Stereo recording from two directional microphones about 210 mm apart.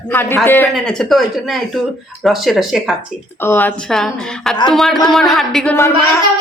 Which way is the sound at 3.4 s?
10° left (ahead or behind).